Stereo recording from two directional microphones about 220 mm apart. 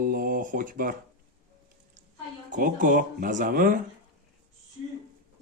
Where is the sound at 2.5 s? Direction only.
35° right (ahead or behind).